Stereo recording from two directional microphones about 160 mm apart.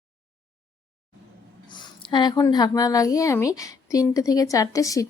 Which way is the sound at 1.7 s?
30° left (ahead or behind).